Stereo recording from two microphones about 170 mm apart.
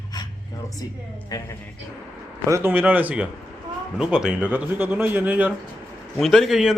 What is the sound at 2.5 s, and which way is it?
A man's voice, 10° right (ahead or behind).